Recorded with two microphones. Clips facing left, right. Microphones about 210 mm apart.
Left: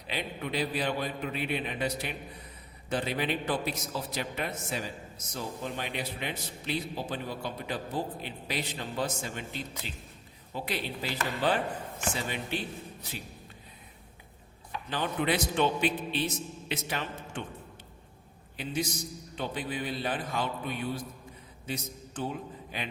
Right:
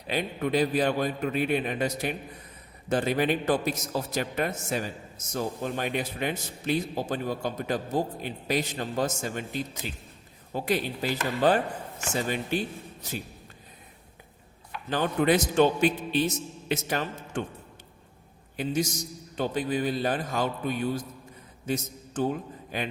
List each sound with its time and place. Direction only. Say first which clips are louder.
0.1 s a man's voice: right 7 dB; 45° right (ahead or behind)
14.8 s a man's voice: right 6 dB; 45° right (ahead or behind)
18.5 s a man's voice: right 5 dB; 45° right (ahead or behind)